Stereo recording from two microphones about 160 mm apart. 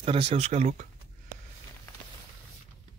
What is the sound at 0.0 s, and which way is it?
Speech, 35° right (ahead or behind).